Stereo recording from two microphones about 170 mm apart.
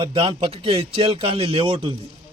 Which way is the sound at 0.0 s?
30° right (ahead or behind).